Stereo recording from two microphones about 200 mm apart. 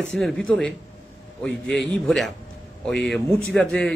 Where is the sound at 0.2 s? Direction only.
5° left (ahead or behind).